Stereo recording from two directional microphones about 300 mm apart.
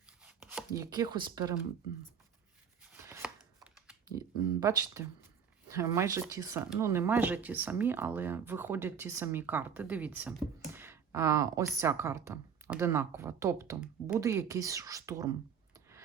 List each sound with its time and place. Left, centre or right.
0.2 s chopping: centre
2.8 s a sound: centre
4.6 s speech: centre